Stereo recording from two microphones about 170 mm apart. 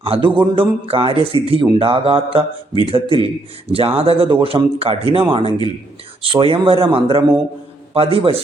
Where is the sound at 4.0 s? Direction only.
35° right (ahead or behind).